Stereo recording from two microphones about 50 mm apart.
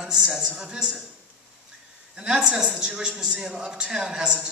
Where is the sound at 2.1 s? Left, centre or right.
Centre.